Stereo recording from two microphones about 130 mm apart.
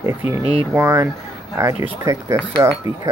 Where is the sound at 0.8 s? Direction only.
20° right (ahead or behind).